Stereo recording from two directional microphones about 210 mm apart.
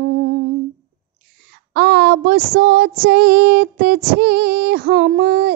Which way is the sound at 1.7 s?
50° right (ahead or behind).